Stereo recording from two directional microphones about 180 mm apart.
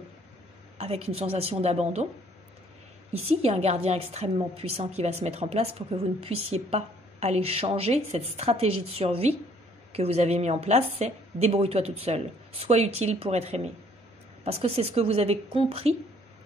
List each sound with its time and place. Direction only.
0.7 s a woman's voice: 35° right (ahead or behind)
3.1 s a woman's voice: 35° right (ahead or behind)